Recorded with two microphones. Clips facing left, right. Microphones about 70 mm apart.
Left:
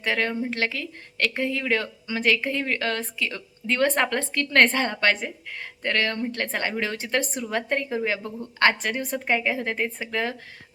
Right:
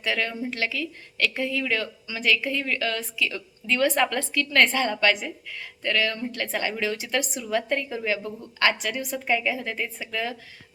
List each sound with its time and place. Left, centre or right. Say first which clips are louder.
0.0 s speech: left 2 dB; left